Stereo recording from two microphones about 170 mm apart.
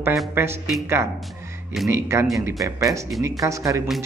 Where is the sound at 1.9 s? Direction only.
15° right (ahead or behind).